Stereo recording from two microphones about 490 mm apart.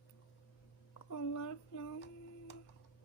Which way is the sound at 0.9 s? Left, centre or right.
Left.